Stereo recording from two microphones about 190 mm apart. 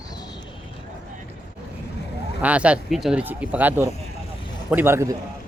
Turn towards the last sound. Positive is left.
turn(degrees=-15)  # may be behind; listen again after turning